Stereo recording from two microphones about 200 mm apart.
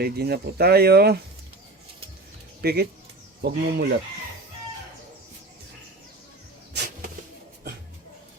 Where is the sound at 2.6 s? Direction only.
55° right (ahead or behind).